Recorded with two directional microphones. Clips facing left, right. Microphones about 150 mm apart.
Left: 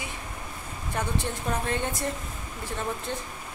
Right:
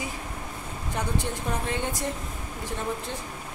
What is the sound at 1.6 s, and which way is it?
Speech, 15° right (ahead or behind).